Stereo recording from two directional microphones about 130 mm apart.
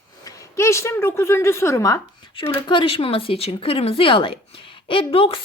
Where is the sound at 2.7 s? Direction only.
40° left (ahead or behind).